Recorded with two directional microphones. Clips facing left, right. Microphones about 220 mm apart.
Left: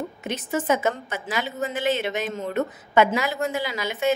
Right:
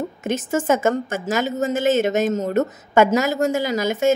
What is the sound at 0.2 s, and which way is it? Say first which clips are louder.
A woman's voice: right 6 dB; 45° right (ahead or behind).